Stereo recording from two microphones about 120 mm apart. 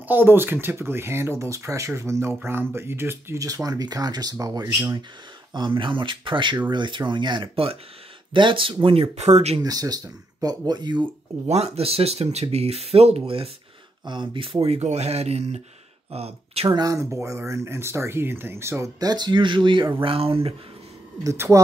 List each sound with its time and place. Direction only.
0.1 s speech: 15° right (ahead or behind)
5.5 s speech: 45° right (ahead or behind); by 9.6 s 65° right (ahead or behind)
9.6 s speech: 30° right (ahead or behind)
11.4 s speech: 60° right (ahead or behind)
16.7 s speech: 30° right (ahead or behind); by 20.5 s 55° right (ahead or behind)
21.2 s speech: 25° right (ahead or behind)